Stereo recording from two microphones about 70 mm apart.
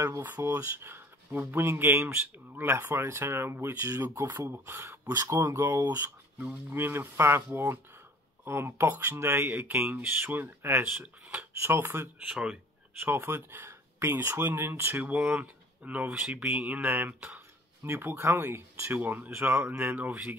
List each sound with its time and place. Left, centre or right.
0.2 s speech: right
12.3 s speech: centre
13.0 s speech: right
15.0 s speech: right
17.8 s speech: right
18.9 s speech: right